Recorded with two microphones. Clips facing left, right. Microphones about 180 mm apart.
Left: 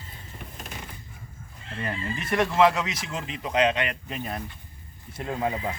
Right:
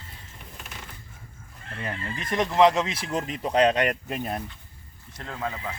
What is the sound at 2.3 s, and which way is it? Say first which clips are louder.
Speech: right 1 dB; 20° right (ahead or behind).